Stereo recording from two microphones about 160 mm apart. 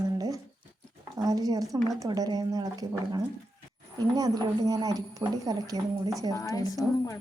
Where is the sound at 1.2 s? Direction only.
25° right (ahead or behind).